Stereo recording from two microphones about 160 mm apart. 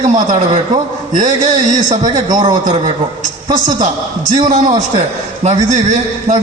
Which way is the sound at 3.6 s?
50° right (ahead or behind).